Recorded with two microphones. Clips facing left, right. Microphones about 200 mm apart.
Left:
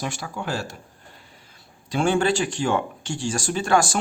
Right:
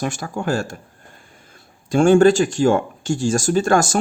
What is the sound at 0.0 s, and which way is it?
Speech, 45° right (ahead or behind).